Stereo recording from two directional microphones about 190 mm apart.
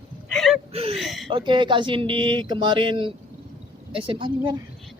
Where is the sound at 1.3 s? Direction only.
25° right (ahead or behind).